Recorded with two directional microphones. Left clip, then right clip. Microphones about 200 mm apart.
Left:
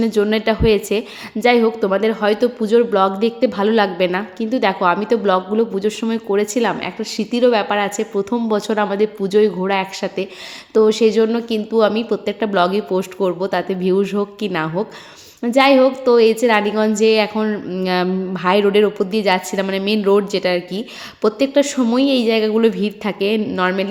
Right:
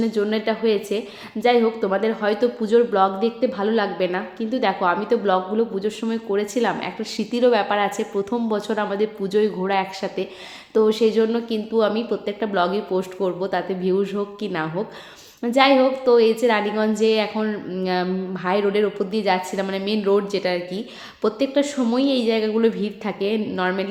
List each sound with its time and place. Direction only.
0.0 s a woman's voice: 30° left (ahead or behind)